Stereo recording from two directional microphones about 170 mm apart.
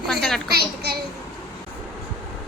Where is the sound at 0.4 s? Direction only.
70° right (ahead or behind).